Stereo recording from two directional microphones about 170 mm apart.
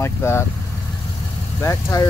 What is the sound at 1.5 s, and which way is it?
Speech, 15° left (ahead or behind).